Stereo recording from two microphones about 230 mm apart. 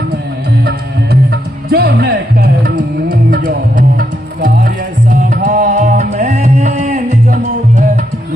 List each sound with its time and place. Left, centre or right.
1.1 s music: right